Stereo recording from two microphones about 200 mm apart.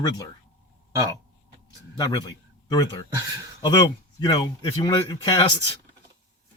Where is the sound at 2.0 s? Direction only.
20° left (ahead or behind).